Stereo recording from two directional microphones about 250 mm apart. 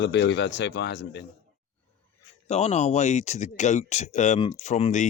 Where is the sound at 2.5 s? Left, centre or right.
Left.